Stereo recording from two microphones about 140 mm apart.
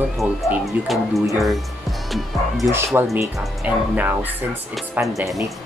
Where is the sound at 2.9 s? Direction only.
15° right (ahead or behind).